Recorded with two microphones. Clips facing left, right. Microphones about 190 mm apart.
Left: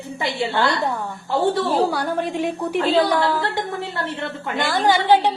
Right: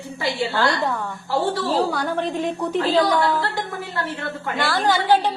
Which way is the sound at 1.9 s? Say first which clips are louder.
Left 1 dB; 10° left (ahead or behind).